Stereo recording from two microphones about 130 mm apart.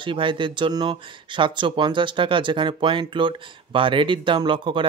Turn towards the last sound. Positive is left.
turn(degrees=-40)  # may be behind; listen again after turning